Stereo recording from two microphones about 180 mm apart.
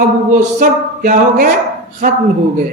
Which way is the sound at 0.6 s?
50° right (ahead or behind).